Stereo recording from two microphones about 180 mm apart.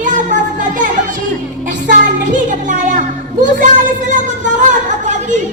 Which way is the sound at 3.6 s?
45° right (ahead or behind).